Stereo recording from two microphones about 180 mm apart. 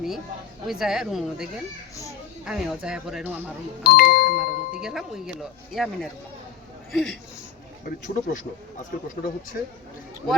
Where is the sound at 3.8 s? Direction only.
60° left (ahead or behind).